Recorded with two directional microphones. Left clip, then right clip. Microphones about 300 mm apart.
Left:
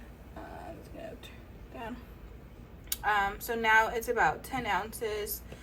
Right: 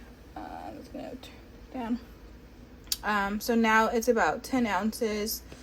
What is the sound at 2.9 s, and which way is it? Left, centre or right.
A woman's voice, right.